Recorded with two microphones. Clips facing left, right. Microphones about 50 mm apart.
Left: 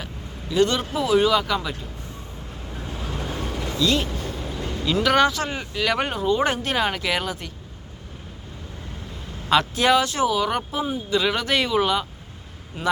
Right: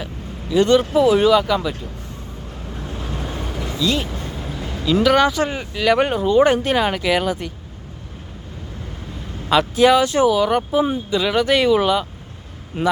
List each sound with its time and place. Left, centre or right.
0.5 s speech: centre
3.6 s vehicle: centre
5.0 s speech: centre
9.5 s speech: centre
10.0 s speech: centre
10.2 s speech: centre
12.7 s speech: right